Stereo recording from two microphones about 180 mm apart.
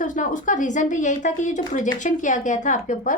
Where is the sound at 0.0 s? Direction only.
45° left (ahead or behind).